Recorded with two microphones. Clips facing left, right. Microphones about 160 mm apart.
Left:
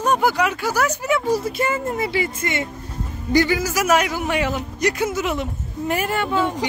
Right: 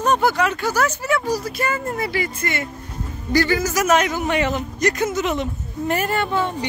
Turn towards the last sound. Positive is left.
turn(degrees=10)  # may be behind; listen again after turning